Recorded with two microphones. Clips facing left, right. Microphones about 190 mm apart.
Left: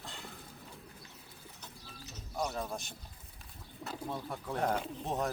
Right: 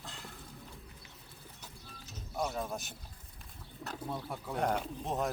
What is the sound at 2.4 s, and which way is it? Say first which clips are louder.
Speech: right 1 dB; centre (ahead or behind).